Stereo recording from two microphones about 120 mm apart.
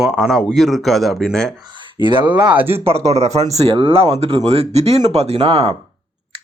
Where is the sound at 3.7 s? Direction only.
50° right (ahead or behind).